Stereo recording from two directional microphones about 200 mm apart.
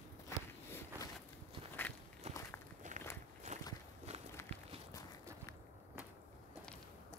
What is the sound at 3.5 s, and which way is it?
Walk, 35° right (ahead or behind).